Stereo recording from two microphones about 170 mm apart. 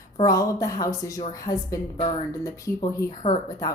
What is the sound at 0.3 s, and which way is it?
A woman's voice, 20° left (ahead or behind).